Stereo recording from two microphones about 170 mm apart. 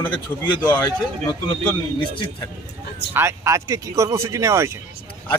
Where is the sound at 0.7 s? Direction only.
25° left (ahead or behind).